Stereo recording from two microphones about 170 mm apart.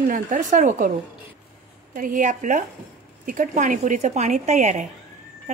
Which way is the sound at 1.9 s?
50° right (ahead or behind).